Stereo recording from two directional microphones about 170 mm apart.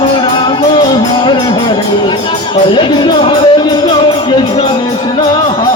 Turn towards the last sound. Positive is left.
turn(degrees=25)  # may be behind; listen again after turning